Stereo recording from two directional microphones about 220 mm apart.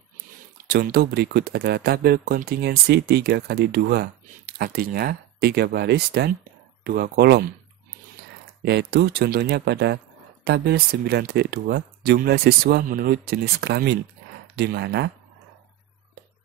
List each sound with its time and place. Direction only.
0.7 s speech: 45° right (ahead or behind)
8.6 s speech: 50° right (ahead or behind)